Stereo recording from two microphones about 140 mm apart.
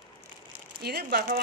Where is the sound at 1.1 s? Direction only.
90° right.